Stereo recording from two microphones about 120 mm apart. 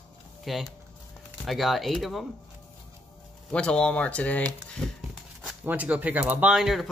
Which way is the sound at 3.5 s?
10° left (ahead or behind).